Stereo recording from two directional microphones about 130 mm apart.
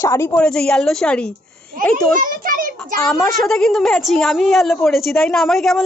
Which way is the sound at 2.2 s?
90° right.